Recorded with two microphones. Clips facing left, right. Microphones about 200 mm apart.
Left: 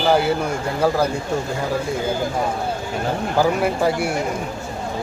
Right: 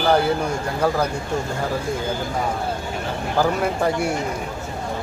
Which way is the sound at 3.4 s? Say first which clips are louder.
Left 1 dB; 5° left (ahead or behind).